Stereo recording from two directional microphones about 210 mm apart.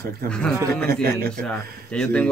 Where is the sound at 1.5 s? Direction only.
5° left (ahead or behind).